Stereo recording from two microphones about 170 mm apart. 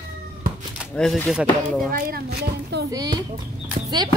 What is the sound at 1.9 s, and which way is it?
Speech, 60° right (ahead or behind).